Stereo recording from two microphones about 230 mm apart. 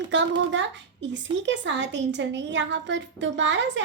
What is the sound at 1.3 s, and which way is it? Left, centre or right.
A woman's voice, right.